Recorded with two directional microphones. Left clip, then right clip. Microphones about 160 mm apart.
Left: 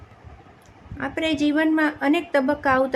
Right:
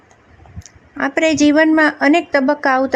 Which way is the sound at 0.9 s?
60° right (ahead or behind).